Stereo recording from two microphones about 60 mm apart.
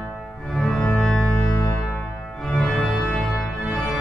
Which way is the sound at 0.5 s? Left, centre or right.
Centre.